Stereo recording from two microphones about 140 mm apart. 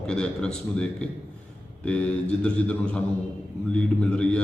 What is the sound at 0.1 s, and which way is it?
A man's voice, 5° left (ahead or behind).